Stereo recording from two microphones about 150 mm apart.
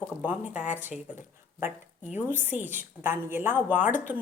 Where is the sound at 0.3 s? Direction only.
10° right (ahead or behind).